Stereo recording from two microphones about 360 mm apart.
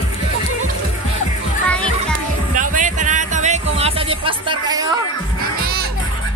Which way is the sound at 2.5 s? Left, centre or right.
Right.